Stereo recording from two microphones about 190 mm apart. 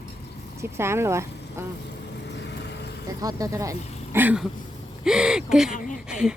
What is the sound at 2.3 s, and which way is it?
Vehicle, 65° left (ahead or behind).